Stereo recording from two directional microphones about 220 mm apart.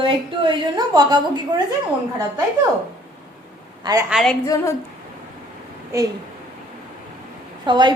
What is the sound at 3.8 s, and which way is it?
Speech, 15° right (ahead or behind).